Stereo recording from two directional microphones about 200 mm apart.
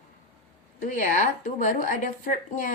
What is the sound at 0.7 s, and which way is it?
Speech, 40° left (ahead or behind).